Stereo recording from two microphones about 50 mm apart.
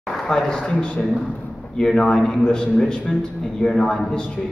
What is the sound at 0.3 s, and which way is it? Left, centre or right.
A man's voice, centre.